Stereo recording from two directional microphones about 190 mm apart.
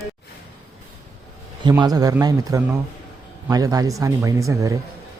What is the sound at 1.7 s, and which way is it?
A man's voice, 20° right (ahead or behind).